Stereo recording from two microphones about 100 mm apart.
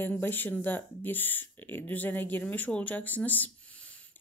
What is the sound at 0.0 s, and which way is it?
Speech, 20° left (ahead or behind).